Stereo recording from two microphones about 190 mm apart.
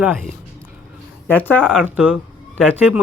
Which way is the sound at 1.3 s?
10° left (ahead or behind).